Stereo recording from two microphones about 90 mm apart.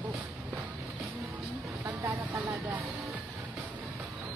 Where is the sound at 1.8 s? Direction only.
30° right (ahead or behind).